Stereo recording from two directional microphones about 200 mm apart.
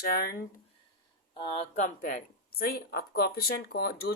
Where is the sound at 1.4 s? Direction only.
35° left (ahead or behind); by 3.9 s 55° left (ahead or behind).